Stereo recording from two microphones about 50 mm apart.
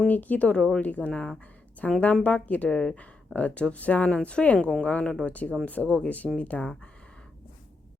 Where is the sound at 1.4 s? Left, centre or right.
Left.